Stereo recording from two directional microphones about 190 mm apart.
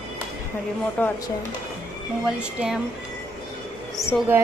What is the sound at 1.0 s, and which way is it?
Speech, 5° left (ahead or behind).